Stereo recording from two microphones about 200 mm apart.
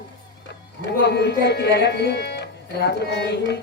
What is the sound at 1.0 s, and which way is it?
Speech, 55° left (ahead or behind).